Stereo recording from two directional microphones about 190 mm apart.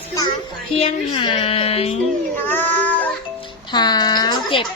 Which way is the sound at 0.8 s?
30° left (ahead or behind).